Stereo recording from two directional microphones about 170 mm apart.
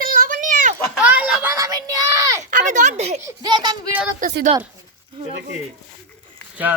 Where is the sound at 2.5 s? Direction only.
50° right (ahead or behind).